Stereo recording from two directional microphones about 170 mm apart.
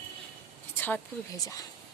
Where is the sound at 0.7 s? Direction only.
10° left (ahead or behind).